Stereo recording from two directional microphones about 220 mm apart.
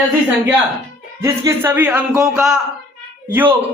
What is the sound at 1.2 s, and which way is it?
A man's voice, 10° right (ahead or behind).